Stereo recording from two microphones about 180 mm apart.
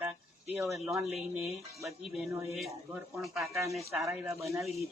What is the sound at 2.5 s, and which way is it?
Speech, centre (ahead or behind).